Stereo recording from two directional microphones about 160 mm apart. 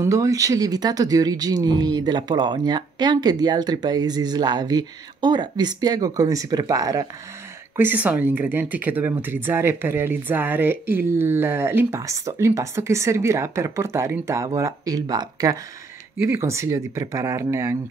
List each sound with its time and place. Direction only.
0.0 s speech: 20° right (ahead or behind)
7.7 s speech: 10° right (ahead or behind)